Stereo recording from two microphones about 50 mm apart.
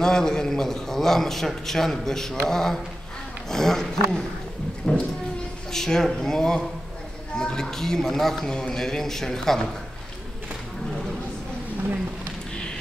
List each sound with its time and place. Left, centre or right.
0.0 s a man's voice: centre
4.9 s speech: left
5.7 s a man's voice: centre